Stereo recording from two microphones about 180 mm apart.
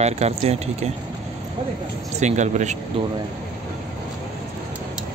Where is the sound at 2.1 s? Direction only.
40° right (ahead or behind).